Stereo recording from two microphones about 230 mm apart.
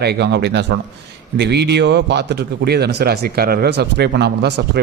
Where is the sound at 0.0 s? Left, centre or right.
Right.